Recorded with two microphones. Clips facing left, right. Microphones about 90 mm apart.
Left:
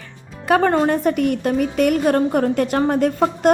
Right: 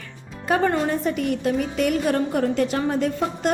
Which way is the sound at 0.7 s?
55° left (ahead or behind).